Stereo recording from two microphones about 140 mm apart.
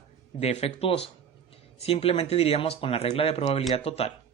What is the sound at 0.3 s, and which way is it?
Speech, 50° left (ahead or behind).